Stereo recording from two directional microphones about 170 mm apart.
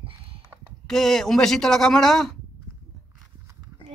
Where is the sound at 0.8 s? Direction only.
Centre (ahead or behind).